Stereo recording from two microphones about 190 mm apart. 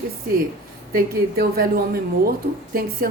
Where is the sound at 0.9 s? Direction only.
50° right (ahead or behind).